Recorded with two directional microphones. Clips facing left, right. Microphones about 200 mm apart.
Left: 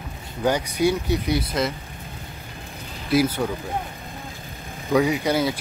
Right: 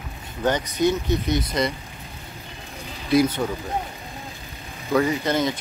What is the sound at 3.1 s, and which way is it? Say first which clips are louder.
Speech: right 1 dB; 5° left (ahead or behind).